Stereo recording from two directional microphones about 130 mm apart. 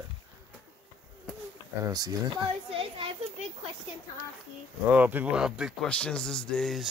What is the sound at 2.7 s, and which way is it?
Children playing, 45° right (ahead or behind).